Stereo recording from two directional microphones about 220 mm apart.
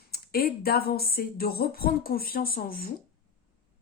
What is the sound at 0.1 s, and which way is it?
Speech, 45° left (ahead or behind).